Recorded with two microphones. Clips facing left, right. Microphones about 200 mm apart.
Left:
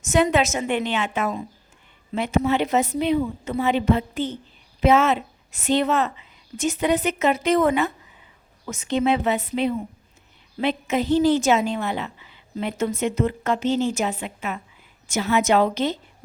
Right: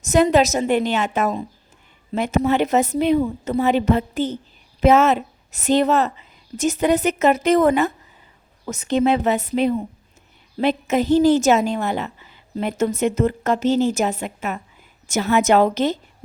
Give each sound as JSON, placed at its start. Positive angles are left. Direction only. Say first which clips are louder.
{"t": 0.0, "sound": "a woman's voice", "louder": "right 4 dB", "side_deg": -40}